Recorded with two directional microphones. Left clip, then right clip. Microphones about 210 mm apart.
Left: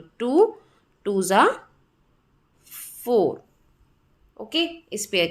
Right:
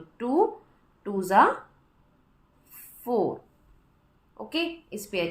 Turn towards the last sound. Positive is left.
turn(degrees=35)  # may be behind; listen again after turning